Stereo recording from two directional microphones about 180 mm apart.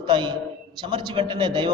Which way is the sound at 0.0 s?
25° right (ahead or behind).